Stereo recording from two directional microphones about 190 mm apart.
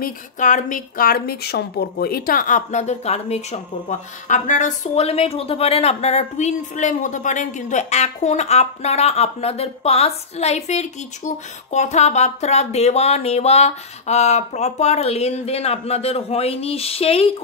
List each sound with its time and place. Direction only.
0.0 s a woman's voice: 45° left (ahead or behind)